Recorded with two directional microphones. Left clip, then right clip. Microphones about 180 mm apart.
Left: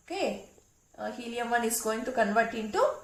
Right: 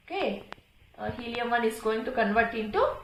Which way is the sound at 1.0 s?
25° right (ahead or behind).